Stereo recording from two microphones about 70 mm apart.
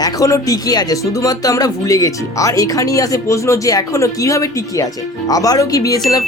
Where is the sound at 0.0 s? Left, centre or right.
Left.